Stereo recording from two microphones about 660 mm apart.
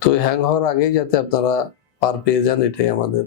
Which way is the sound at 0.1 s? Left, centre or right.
Left.